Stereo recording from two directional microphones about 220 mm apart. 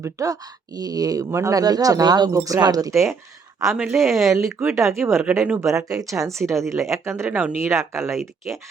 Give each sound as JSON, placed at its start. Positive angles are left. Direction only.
{"t": 0.0, "sound": "speech", "side_deg": -15}
{"t": 3.9, "sound": "speech", "side_deg": 0}
{"t": 4.3, "sound": "speech", "side_deg": -15}
{"t": 8.1, "sound": "speech", "side_deg": 0}